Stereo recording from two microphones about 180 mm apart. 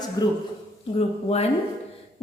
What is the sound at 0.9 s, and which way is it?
Speech, 35° left (ahead or behind).